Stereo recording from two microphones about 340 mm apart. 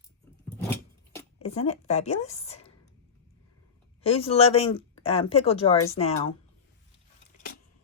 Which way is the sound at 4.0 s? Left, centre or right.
Centre.